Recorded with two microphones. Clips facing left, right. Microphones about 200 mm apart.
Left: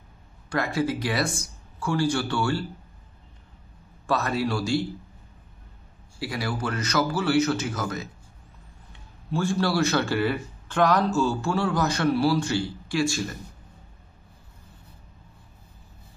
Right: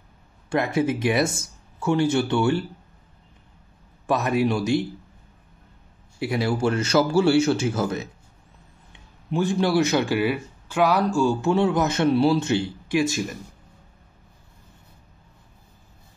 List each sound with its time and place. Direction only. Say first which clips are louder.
0.5 s speech: right 3 dB; 20° right (ahead or behind)
4.1 s speech: right 4 dB; 20° right (ahead or behind)
6.1 s speech: right 6 dB; 25° right (ahead or behind)